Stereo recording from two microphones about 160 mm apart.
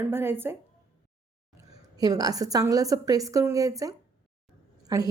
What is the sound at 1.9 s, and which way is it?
A woman's voice, 25° right (ahead or behind).